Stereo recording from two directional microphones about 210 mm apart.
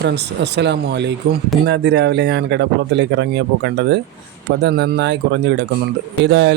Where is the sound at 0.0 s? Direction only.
55° right (ahead or behind).